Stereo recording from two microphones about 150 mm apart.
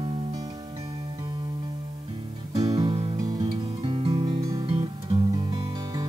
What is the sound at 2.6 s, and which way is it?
Music, 25° right (ahead or behind).